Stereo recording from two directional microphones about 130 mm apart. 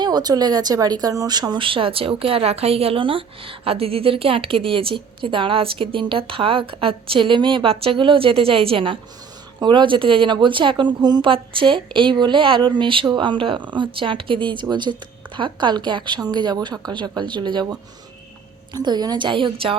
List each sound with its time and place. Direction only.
0.0 s speech: 30° right (ahead or behind)